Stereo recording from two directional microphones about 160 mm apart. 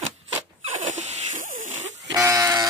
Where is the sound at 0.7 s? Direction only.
45° right (ahead or behind).